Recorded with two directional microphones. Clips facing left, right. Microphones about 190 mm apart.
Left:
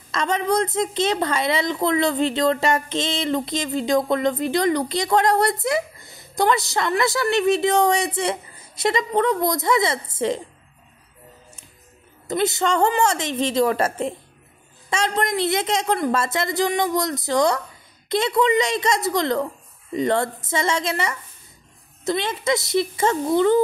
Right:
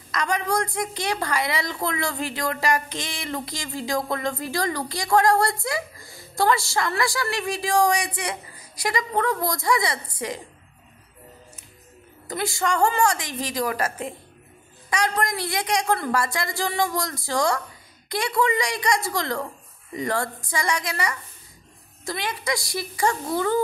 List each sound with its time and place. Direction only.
0.1 s a woman's voice: 25° left (ahead or behind)
12.3 s a woman's voice: 20° left (ahead or behind)